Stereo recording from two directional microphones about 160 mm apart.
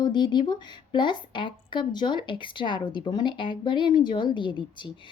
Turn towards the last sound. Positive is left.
turn(degrees=30)  # may be behind; listen again after turning